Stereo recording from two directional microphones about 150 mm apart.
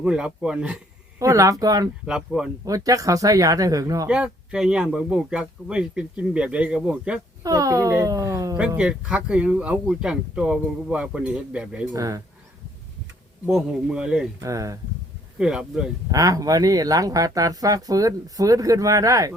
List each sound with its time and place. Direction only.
0.0 s speech: 5° right (ahead or behind)
1.2 s speech: 20° right (ahead or behind)
2.0 s a man's voice: 5° right (ahead or behind)
2.6 s speech: 25° right (ahead or behind)
4.1 s speech: 5° right (ahead or behind)
7.4 s speech: 20° right (ahead or behind)
8.5 s speech: 10° right (ahead or behind)
11.9 s speech: 20° right (ahead or behind)
13.4 s a man's voice: 5° right (ahead or behind)
14.4 s speech: 20° right (ahead or behind)
15.4 s a man's voice: 5° right (ahead or behind)
16.1 s speech: 25° right (ahead or behind)